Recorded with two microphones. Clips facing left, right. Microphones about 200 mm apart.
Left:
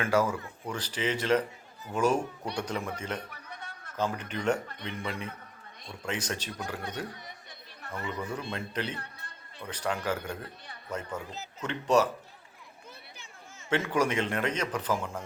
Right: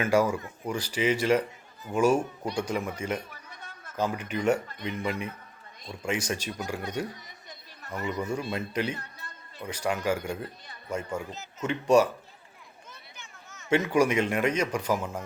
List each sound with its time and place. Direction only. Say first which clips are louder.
0.0 s a man's voice: right 3 dB; 10° right (ahead or behind)
3.2 s chatter: left 2 dB; 65° left (ahead or behind)
3.9 s a man's voice: right 3 dB; 10° right (ahead or behind)
8.2 s a man's voice: right 4 dB; 10° right (ahead or behind)
12.9 s a sound: right 1 dB; 30° left (ahead or behind)
13.7 s a man's voice: right 4 dB; 10° right (ahead or behind)